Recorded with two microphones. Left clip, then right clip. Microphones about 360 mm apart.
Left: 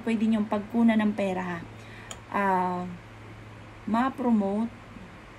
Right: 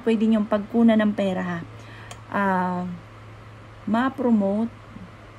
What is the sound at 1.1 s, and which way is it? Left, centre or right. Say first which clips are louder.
Speech: right 4 dB; right.